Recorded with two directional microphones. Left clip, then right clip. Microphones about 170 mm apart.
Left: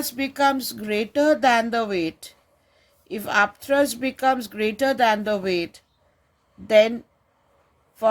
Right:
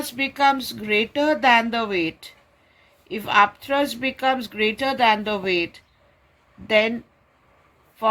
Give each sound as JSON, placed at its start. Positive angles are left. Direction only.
{"t": 0.1, "sound": "speech", "side_deg": 55}